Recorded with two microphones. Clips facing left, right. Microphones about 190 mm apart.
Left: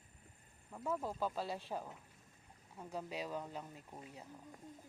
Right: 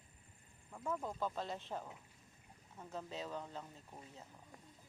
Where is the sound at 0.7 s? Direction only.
5° left (ahead or behind).